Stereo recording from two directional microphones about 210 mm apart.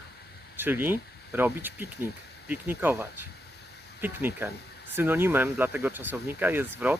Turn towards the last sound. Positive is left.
turn(degrees=-10)  # may be behind; listen again after turning